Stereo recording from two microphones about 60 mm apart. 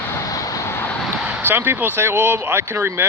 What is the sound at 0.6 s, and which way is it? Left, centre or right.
Vehicle, left.